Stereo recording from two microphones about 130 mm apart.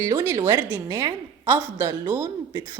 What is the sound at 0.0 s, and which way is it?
A woman's voice, 30° right (ahead or behind).